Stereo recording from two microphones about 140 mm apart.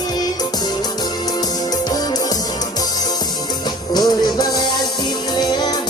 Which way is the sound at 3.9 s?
30° left (ahead or behind).